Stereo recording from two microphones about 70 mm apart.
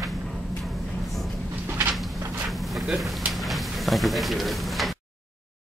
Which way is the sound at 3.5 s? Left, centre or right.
Centre.